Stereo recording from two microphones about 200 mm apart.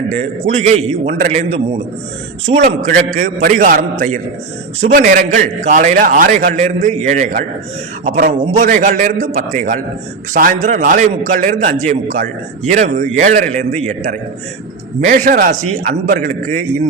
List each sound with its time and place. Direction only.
0.1 s a man's voice: 35° right (ahead or behind)